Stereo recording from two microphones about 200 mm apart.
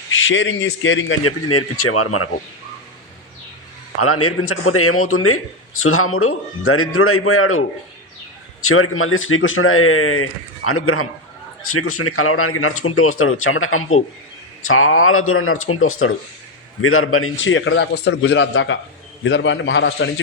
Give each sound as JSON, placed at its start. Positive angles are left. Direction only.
{"t": 0.1, "sound": "a man's voice", "side_deg": 70}
{"t": 3.9, "sound": "a man's voice", "side_deg": 90}
{"t": 8.6, "sound": "a man's voice", "side_deg": 90}